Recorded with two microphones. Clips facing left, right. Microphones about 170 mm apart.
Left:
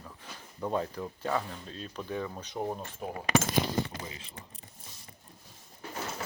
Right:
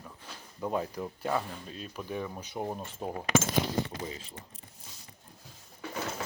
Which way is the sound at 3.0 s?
30° right (ahead or behind).